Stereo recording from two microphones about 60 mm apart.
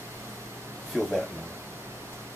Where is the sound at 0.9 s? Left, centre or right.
Centre.